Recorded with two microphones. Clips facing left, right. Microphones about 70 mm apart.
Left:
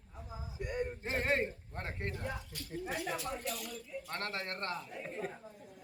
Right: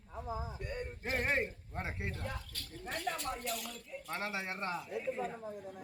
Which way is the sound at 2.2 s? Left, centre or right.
Centre.